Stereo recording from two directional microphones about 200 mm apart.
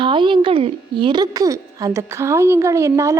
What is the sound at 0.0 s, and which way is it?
A woman's voice, 25° right (ahead or behind).